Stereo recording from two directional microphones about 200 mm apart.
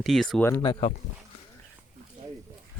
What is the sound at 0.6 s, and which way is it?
Speech, 25° left (ahead or behind).